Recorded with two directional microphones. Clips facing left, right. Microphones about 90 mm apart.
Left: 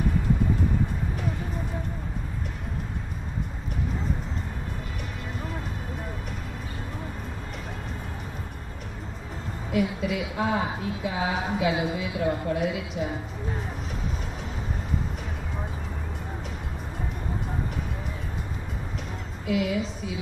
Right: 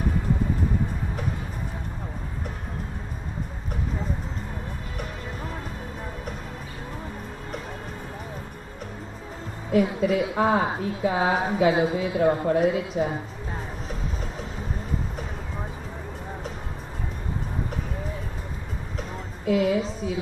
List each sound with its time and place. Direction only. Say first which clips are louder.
9.7 s a woman's voice: right 5 dB; 40° right (ahead or behind)
19.4 s a woman's voice: right 4 dB; 40° right (ahead or behind)